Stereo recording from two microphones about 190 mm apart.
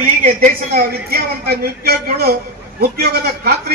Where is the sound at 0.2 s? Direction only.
45° right (ahead or behind).